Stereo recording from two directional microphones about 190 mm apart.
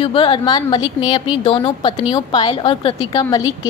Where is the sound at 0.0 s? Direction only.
25° left (ahead or behind).